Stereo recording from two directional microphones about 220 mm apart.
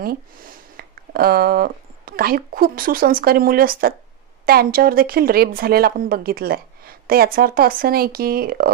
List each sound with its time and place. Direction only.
0.0 s speech: 40° right (ahead or behind)